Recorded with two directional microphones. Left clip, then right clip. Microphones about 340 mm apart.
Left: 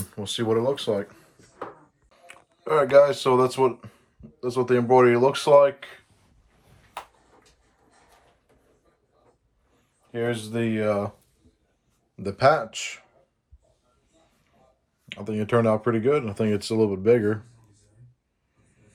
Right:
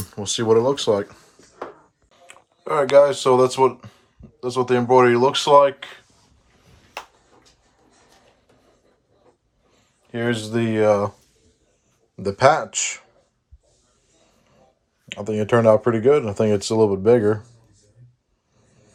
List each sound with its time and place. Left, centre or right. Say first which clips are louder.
0.1 s speech: right 7 dB; centre
2.1 s speech: right 1 dB; centre
10.1 s speech: right 4 dB; right
12.1 s speech: right 4 dB; centre
15.1 s speech: right 5 dB; centre